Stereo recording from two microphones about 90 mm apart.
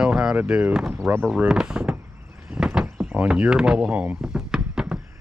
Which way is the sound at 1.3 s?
10° right (ahead or behind).